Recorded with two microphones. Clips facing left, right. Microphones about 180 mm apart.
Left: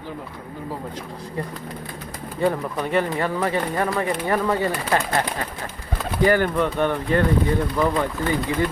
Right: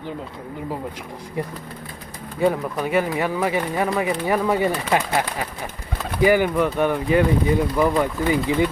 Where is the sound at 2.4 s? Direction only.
5° right (ahead or behind).